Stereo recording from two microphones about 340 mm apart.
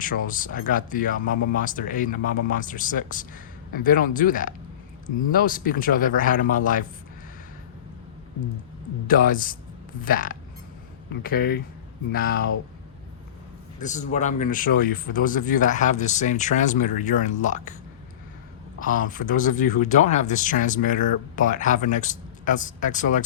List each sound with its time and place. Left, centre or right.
0.0 s speech: left
9.0 s speech: left
13.7 s a man's voice: left
18.8 s speech: left